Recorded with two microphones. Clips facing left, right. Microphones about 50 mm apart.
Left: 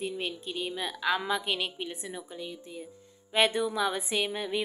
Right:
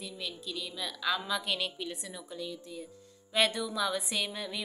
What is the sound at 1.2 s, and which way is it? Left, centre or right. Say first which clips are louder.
A woman's voice: left 3 dB; left.